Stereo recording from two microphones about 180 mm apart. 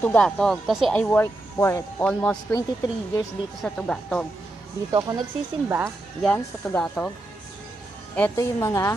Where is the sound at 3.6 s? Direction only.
Centre (ahead or behind).